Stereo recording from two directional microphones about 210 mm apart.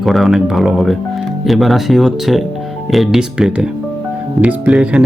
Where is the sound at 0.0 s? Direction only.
Centre (ahead or behind).